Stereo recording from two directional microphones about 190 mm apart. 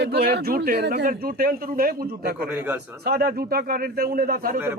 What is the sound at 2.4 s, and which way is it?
Speech, 10° right (ahead or behind).